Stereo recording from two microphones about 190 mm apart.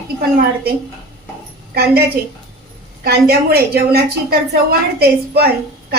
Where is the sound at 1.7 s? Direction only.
55° right (ahead or behind).